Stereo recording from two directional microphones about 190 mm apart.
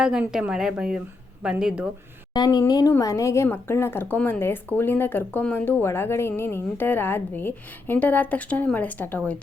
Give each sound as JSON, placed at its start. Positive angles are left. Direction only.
{"t": 0.0, "sound": "a woman's voice", "side_deg": -5}
{"t": 2.3, "sound": "a woman's voice", "side_deg": 20}